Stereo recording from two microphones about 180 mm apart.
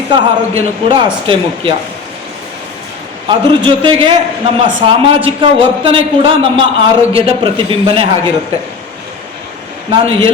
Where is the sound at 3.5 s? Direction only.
30° right (ahead or behind).